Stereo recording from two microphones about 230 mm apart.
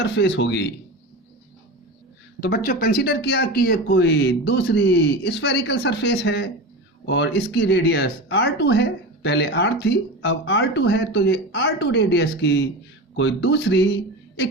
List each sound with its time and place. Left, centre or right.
0.0 s speech: left
2.4 s speech: left